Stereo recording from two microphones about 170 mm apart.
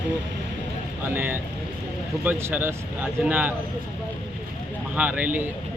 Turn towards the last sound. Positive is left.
turn(degrees=-10)  # may be behind; listen again after turning